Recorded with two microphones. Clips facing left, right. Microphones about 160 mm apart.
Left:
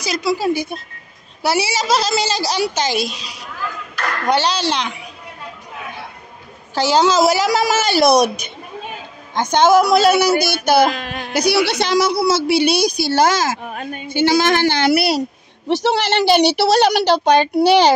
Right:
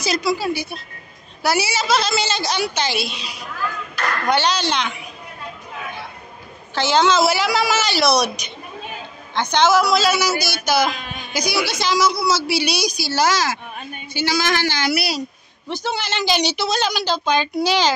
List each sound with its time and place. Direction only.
0.1 s speech: 25° left (ahead or behind)
0.4 s speech: 45° left (ahead or behind)
1.4 s a woman's voice: 30° left (ahead or behind)
4.3 s a woman's voice: 35° left (ahead or behind)
6.7 s a woman's voice: 40° left (ahead or behind)
9.3 s a man's voice: 45° left (ahead or behind)
13.7 s a woman's voice: 90° left
14.0 s a man's voice: 55° left (ahead or behind)
15.7 s a man's voice: 80° left; by 17.9 s 65° left (ahead or behind)